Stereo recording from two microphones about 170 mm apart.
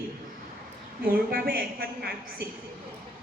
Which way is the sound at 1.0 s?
65° right (ahead or behind).